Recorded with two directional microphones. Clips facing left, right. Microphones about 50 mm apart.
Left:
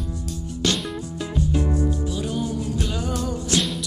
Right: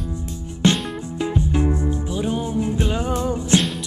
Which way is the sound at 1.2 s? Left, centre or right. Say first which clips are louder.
Right 3 dB; right.